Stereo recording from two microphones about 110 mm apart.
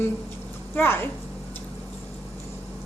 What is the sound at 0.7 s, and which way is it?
Speech, 20° left (ahead or behind).